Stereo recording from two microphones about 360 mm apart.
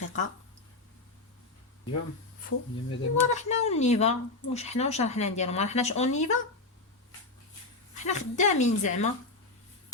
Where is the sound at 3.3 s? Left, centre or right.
Centre.